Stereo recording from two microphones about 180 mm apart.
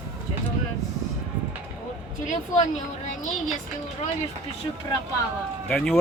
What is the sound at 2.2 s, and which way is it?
Speech, 40° left (ahead or behind).